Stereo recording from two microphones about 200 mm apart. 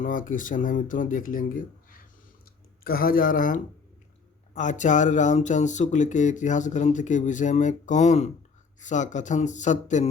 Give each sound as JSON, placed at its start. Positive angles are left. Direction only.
{"t": 0.0, "sound": "speech", "side_deg": 40}